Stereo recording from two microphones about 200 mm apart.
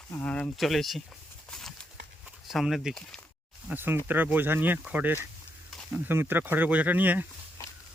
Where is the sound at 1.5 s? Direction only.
Centre (ahead or behind).